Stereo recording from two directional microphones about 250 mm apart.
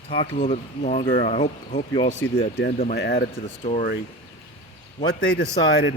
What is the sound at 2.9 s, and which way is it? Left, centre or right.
Speech, left.